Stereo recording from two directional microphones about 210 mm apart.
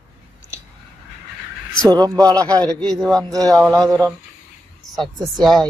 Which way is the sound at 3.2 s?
15° right (ahead or behind).